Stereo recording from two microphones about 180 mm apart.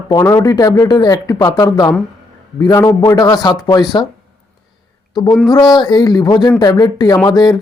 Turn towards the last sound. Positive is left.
turn(degrees=20)  # may be behind; listen again after turning